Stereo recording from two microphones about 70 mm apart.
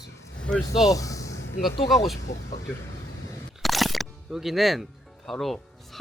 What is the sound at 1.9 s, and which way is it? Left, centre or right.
Speech, centre.